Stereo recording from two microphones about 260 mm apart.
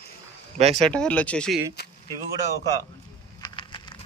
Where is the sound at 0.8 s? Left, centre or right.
Centre.